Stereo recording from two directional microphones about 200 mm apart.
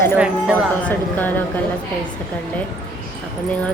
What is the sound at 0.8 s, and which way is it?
Speech, 10° left (ahead or behind).